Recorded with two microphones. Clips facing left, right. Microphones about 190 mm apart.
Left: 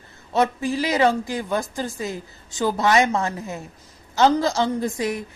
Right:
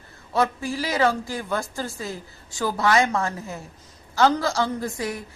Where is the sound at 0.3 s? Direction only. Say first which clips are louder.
Left 3 dB; 20° left (ahead or behind).